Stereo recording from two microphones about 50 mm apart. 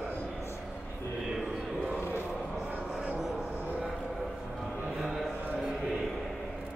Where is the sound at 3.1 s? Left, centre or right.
Centre.